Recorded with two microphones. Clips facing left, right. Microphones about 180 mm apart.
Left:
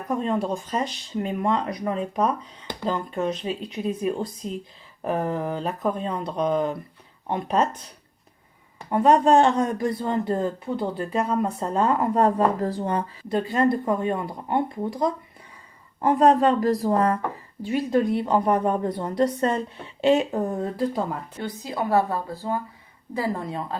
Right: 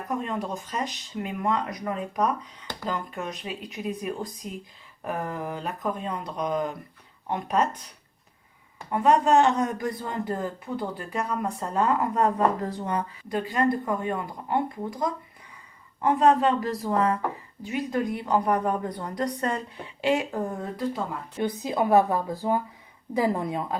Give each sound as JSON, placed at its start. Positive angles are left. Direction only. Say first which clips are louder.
{"t": 0.5, "sound": "speech", "louder": "left 4 dB", "side_deg": 30}
{"t": 8.9, "sound": "speech", "louder": "left 3 dB", "side_deg": 30}
{"t": 16.0, "sound": "speech", "louder": "left 3 dB", "side_deg": 35}
{"t": 21.3, "sound": "speech", "louder": "right 7 dB", "side_deg": -20}